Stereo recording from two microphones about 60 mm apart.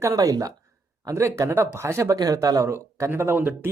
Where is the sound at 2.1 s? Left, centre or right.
Right.